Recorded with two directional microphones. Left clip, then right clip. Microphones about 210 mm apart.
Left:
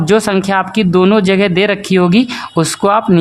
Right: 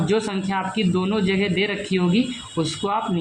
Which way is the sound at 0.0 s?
50° left (ahead or behind).